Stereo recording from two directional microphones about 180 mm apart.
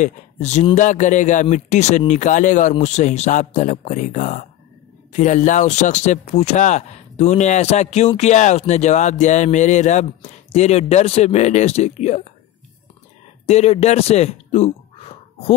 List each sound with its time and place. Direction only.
0.0 s a man's voice: 40° left (ahead or behind)
13.5 s speech: 35° left (ahead or behind)